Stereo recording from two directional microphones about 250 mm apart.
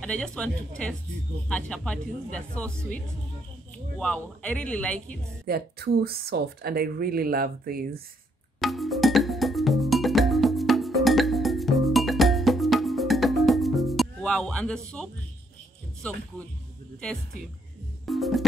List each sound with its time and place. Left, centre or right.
0.0 s speech: centre
4.0 s speech: centre
5.5 s speech: right
8.5 s music: centre
16.0 s speech: centre
18.0 s music: centre